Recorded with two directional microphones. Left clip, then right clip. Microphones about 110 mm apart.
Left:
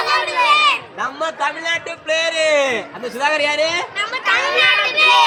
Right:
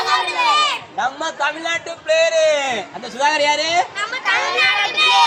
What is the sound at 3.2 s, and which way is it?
Speech, 35° right (ahead or behind).